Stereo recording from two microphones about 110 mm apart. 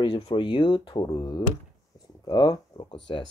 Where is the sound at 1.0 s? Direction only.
30° left (ahead or behind); by 3.3 s 45° left (ahead or behind).